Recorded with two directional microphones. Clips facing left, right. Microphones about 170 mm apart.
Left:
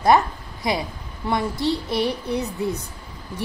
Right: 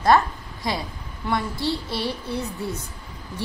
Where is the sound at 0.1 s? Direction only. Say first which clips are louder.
Left 1 dB; 15° left (ahead or behind).